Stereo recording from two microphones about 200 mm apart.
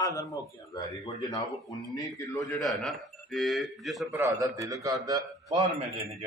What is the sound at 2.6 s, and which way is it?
A man's voice, centre (ahead or behind).